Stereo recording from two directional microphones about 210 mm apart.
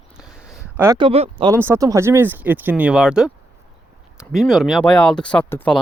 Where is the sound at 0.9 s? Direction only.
25° right (ahead or behind).